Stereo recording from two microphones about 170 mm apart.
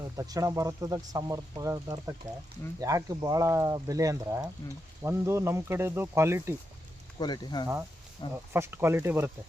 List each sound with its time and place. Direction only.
0.2 s speech: 20° right (ahead or behind)
7.2 s speech: 25° left (ahead or behind)
8.3 s speech: 15° right (ahead or behind)